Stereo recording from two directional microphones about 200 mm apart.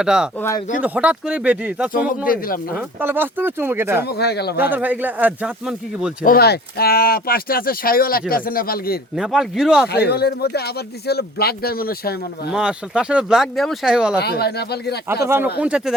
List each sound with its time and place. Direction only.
0.0 s speech: 5° right (ahead or behind)
0.3 s speech: 15° left (ahead or behind)
0.8 s speech: 5° right (ahead or behind)
1.9 s speech: 45° left (ahead or behind)
2.7 s speech: 10° right (ahead or behind)
4.0 s speech: 55° left (ahead or behind)
4.5 s speech: 10° right (ahead or behind)
6.2 s speech: 50° left (ahead or behind)
9.1 s speech: centre (ahead or behind)
9.9 s speech: 55° left (ahead or behind)
12.5 s speech: 5° right (ahead or behind)
14.2 s speech: 55° left (ahead or behind)
15.2 s speech: 10° right (ahead or behind)